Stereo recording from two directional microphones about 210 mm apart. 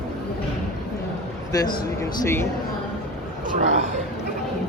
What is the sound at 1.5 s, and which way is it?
A man's voice, 15° left (ahead or behind).